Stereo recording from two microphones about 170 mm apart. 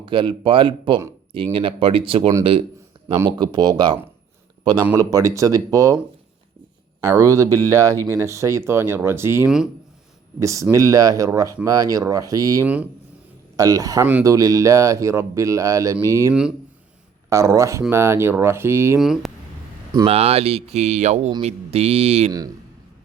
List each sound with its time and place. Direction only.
0.0 s speech: 30° right (ahead or behind)
7.0 s speech: 20° right (ahead or behind)
14.0 s speech: 10° right (ahead or behind)
14.3 s speech: 20° right (ahead or behind)
18.9 s speech: centre (ahead or behind)
20.1 s speech: 35° right (ahead or behind)
22.3 s speech: 20° right (ahead or behind)